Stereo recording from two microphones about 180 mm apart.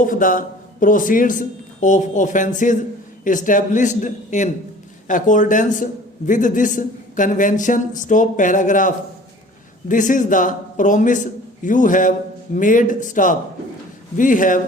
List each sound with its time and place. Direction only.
0.0 s a man's voice: 50° left (ahead or behind)
9.9 s a man's voice: 45° left (ahead or behind)